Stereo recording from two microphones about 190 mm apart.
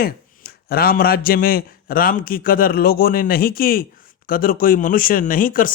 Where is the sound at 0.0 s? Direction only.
50° left (ahead or behind).